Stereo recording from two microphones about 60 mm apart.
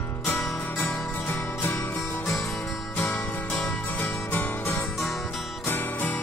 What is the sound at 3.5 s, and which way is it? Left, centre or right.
Music, left.